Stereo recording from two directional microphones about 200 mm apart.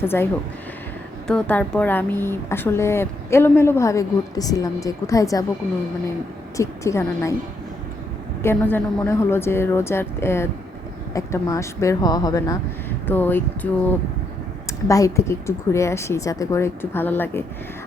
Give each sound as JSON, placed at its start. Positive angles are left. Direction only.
{"t": 0.0, "sound": "a woman's voice", "side_deg": 10}
{"t": 1.3, "sound": "a woman's voice", "side_deg": 5}
{"t": 6.6, "sound": "a woman's voice", "side_deg": 15}
{"t": 8.4, "sound": "a woman's voice", "side_deg": 10}
{"t": 14.8, "sound": "a woman's voice", "side_deg": 15}